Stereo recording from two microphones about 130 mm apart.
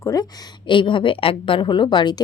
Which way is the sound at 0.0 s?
25° left (ahead or behind).